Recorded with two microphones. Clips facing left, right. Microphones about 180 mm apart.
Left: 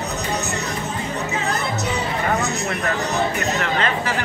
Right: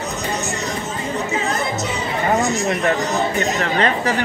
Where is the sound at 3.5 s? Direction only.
35° right (ahead or behind).